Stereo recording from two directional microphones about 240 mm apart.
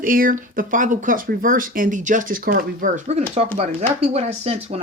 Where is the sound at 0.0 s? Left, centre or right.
Right.